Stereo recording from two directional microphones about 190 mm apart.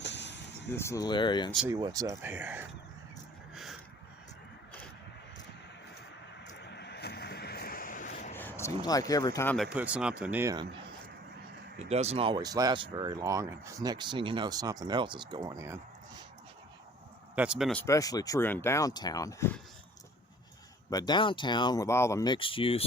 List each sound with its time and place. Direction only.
0.0 s a sound: 65° left (ahead or behind)
0.7 s speech: 15° left (ahead or behind)
1.6 s speech: 15° right (ahead or behind)
3.5 s a sound: centre (ahead or behind)
6.4 s vehicle: 65° left (ahead or behind); by 8.1 s 45° left (ahead or behind)
8.1 s a sound: 35° left (ahead or behind)
8.4 s speech: 10° left (ahead or behind)
9.7 s speech: 5° right (ahead or behind)
11.8 s speech: 35° right (ahead or behind); by 16.2 s 15° right (ahead or behind)
17.3 s speech: 5° right (ahead or behind)
17.8 s speech: 20° left (ahead or behind)
20.9 s speech: 20° left (ahead or behind)